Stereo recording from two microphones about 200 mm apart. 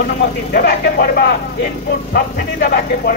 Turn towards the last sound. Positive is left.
turn(degrees=45)  # may be behind; listen again after turning